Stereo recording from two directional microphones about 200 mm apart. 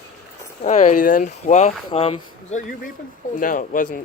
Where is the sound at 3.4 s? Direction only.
40° left (ahead or behind).